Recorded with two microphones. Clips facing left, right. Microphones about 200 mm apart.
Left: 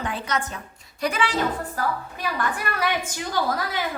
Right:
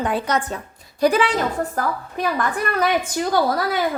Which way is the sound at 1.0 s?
35° right (ahead or behind).